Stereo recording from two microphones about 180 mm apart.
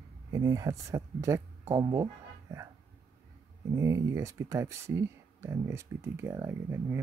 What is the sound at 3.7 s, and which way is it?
Speech, 15° right (ahead or behind).